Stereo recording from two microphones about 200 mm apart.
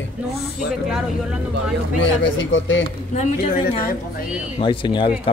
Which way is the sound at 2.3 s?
70° left (ahead or behind).